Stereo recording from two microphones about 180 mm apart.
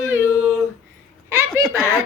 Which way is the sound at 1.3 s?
15° right (ahead or behind).